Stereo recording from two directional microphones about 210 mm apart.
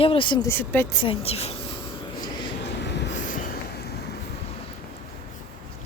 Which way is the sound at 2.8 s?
55° left (ahead or behind).